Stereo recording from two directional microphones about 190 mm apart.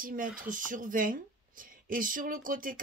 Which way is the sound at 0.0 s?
45° right (ahead or behind).